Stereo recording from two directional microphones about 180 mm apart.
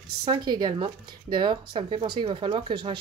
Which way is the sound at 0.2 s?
25° right (ahead or behind).